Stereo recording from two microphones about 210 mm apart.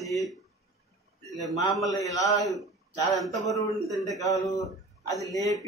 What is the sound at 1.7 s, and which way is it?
Speech, 15° left (ahead or behind).